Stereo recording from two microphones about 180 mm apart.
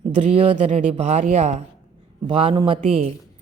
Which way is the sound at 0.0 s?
30° right (ahead or behind).